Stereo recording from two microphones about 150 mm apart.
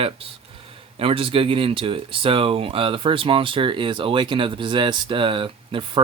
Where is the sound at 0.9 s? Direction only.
40° right (ahead or behind).